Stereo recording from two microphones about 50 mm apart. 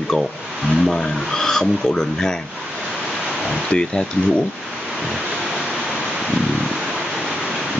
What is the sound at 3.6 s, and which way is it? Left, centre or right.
Speech, centre.